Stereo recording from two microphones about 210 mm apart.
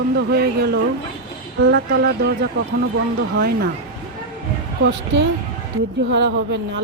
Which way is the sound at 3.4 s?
45° right (ahead or behind).